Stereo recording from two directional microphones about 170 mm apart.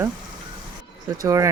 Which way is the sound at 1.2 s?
20° right (ahead or behind).